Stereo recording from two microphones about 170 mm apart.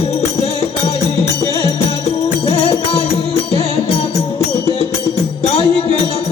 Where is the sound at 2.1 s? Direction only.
35° left (ahead or behind).